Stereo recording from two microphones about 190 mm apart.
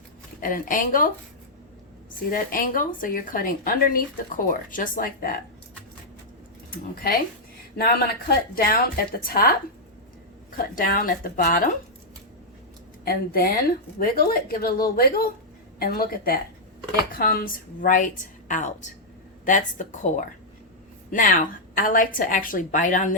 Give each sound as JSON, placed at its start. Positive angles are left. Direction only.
{"t": 0.4, "sound": "a woman's voice", "side_deg": 45}
{"t": 2.3, "sound": "a woman's voice", "side_deg": 45}
{"t": 6.7, "sound": "a woman's voice", "side_deg": 50}
{"t": 10.8, "sound": "a woman's voice", "side_deg": 50}
{"t": 13.1, "sound": "a woman's voice", "side_deg": 55}